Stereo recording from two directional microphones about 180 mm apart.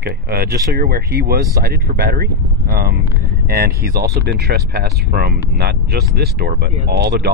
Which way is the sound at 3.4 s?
60° right (ahead or behind).